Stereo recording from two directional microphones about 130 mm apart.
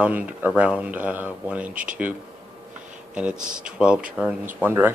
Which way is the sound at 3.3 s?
90° right.